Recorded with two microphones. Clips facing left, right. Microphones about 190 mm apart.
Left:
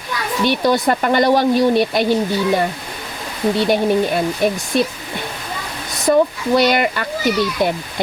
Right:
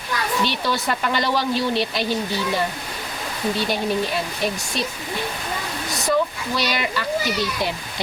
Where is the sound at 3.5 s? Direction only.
55° left (ahead or behind).